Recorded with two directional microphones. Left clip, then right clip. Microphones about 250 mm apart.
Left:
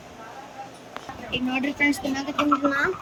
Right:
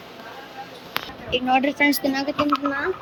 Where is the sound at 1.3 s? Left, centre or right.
Centre.